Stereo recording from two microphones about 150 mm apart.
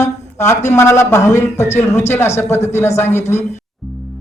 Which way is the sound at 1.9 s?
50° left (ahead or behind).